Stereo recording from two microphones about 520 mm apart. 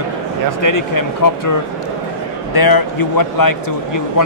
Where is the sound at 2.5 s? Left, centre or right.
Left.